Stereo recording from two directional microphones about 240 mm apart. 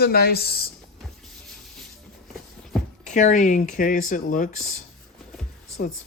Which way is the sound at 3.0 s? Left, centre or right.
Left.